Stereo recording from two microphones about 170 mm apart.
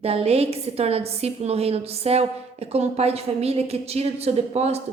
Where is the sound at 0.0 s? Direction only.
35° right (ahead or behind).